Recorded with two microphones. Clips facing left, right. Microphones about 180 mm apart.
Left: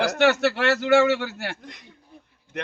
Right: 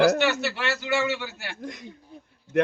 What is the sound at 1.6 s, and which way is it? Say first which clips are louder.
Speech: right 8 dB; 45° right (ahead or behind).